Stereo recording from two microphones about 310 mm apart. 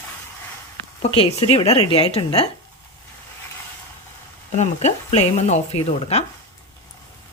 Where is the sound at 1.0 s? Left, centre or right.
Centre.